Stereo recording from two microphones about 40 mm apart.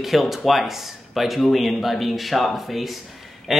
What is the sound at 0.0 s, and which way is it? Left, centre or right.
Speech, centre.